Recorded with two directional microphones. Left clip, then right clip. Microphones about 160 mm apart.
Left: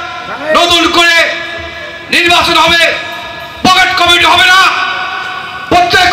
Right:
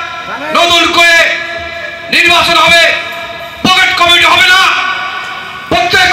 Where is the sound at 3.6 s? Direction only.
45° right (ahead or behind).